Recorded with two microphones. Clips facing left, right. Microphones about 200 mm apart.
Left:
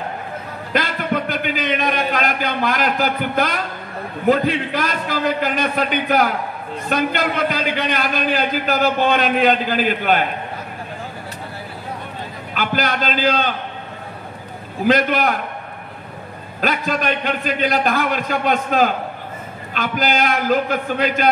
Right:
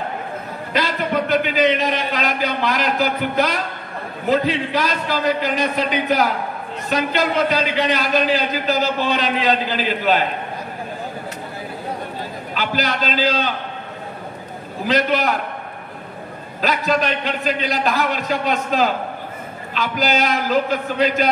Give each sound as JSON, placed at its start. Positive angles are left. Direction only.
{"t": 0.7, "sound": "a man's voice", "side_deg": 55}
{"t": 12.5, "sound": "a man's voice", "side_deg": 55}
{"t": 14.9, "sound": "a man's voice", "side_deg": 55}
{"t": 16.6, "sound": "a man's voice", "side_deg": 55}